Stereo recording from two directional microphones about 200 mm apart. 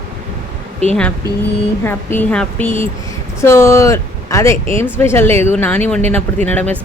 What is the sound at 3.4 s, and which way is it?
Speech, 15° left (ahead or behind).